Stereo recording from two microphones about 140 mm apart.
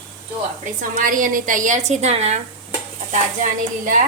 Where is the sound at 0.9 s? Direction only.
75° right (ahead or behind); by 2.4 s 50° right (ahead or behind).